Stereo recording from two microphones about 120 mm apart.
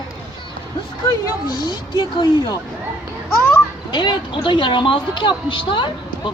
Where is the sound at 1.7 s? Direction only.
35° left (ahead or behind).